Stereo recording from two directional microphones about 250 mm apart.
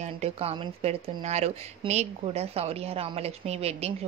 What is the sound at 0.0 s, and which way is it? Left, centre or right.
Speech, right.